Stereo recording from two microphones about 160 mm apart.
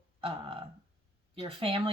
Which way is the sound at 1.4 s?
35° right (ahead or behind).